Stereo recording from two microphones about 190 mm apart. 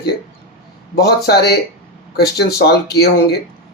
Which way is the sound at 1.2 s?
60° left (ahead or behind).